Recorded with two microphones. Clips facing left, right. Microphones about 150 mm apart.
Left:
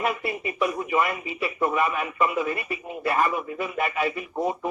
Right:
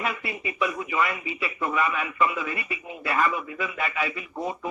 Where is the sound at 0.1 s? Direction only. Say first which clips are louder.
Left 4 dB; 50° left (ahead or behind).